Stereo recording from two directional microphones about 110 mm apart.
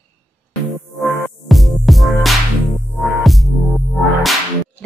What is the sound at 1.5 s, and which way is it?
Music, centre (ahead or behind).